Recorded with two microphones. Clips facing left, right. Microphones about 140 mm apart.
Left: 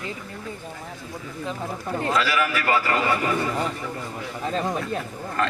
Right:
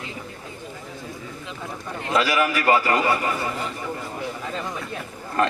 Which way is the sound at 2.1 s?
15° right (ahead or behind).